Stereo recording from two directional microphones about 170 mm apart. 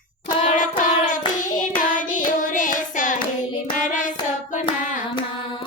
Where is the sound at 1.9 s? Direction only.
50° left (ahead or behind).